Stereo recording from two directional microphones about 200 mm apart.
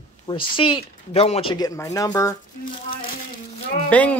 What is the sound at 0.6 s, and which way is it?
Speech, 25° left (ahead or behind).